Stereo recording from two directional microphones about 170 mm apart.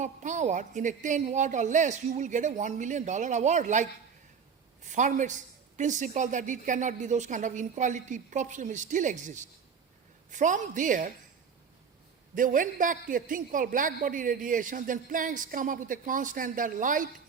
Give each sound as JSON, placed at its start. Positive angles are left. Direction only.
{"t": 0.0, "sound": "a man's voice", "side_deg": -45}
{"t": 12.3, "sound": "a man's voice", "side_deg": -50}